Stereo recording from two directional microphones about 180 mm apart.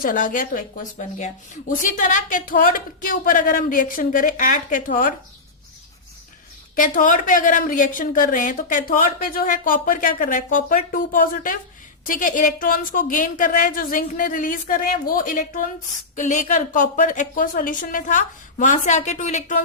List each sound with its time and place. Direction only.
0.0 s a woman's voice: 50° left (ahead or behind)
6.7 s a woman's voice: 45° left (ahead or behind)